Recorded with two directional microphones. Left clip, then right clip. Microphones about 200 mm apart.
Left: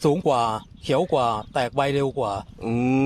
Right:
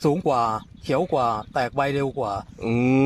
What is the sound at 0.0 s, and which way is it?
A man's voice, 25° left (ahead or behind).